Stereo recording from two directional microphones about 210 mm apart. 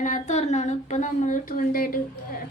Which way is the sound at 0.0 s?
35° left (ahead or behind).